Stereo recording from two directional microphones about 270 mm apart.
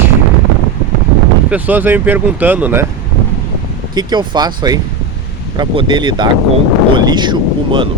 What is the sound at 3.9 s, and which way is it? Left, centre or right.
Speech, centre.